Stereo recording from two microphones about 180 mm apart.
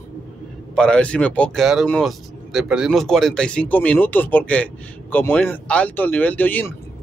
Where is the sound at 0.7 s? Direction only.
5° left (ahead or behind).